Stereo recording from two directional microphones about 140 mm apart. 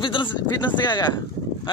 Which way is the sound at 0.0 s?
35° left (ahead or behind).